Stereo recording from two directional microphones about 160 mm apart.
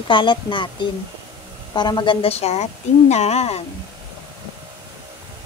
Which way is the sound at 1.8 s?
25° left (ahead or behind).